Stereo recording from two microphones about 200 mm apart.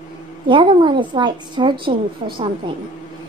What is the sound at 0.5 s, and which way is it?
A woman's voice, 25° right (ahead or behind).